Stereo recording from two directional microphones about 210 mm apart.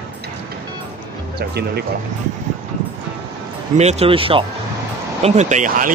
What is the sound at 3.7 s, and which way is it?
Speech, 30° right (ahead or behind).